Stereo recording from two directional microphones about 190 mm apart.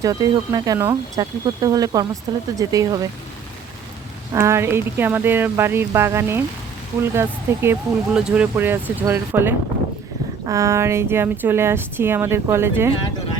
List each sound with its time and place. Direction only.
0.0 s speech: 20° right (ahead or behind)
4.3 s speech: 15° right (ahead or behind)